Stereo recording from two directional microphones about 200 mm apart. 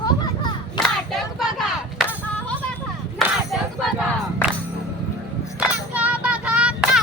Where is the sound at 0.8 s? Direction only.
Centre (ahead or behind).